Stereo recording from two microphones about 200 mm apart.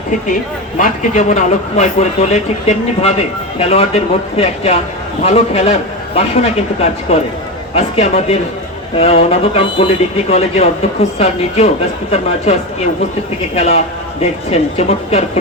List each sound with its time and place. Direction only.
0.8 s speech: 35° left (ahead or behind)
7.1 s speech: 30° left (ahead or behind)